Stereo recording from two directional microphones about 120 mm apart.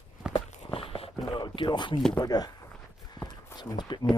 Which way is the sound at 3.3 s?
35° left (ahead or behind).